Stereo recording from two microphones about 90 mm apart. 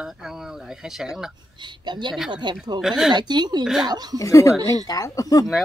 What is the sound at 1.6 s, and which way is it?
Speech, 60° right (ahead or behind).